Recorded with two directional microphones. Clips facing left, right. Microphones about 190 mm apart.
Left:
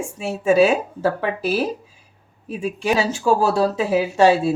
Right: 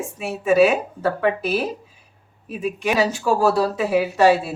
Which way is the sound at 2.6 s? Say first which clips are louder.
Even; 30° left (ahead or behind).